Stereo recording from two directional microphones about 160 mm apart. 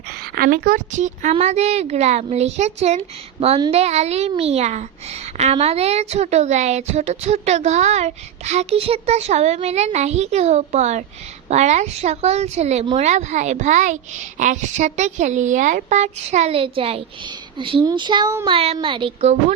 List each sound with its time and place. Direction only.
0.3 s a woman's voice: 65° right (ahead or behind); by 19.3 s 30° right (ahead or behind)